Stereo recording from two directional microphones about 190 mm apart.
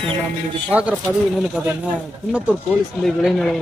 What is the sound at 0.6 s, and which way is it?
Speech, 5° right (ahead or behind).